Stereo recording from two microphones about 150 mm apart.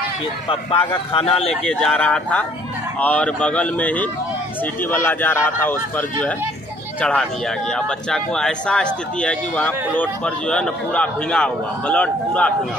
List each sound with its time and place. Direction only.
0.5 s speech: 35° left (ahead or behind)
1.5 s speech: 5° left (ahead or behind)